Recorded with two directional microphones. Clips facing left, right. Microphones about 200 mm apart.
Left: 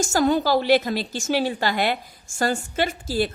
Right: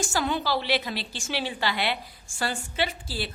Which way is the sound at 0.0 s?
45° left (ahead or behind).